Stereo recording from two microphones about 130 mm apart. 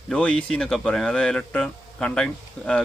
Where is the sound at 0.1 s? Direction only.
10° left (ahead or behind).